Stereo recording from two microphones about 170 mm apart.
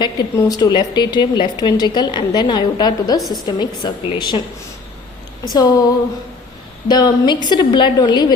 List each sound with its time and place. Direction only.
0.0 s a woman's voice: 20° left (ahead or behind)
3.2 s a woman's voice: centre (ahead or behind)
3.4 s a woman's voice: 25° left (ahead or behind)
5.5 s a woman's voice: 25° left (ahead or behind)
6.8 s a woman's voice: 25° left (ahead or behind)